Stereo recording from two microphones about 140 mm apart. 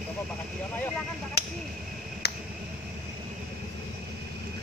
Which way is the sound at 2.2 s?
90° left.